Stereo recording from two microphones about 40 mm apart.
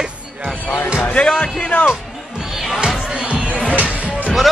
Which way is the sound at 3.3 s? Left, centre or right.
Right.